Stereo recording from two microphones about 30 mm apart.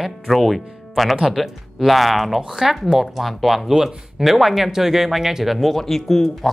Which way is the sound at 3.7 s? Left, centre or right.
Centre.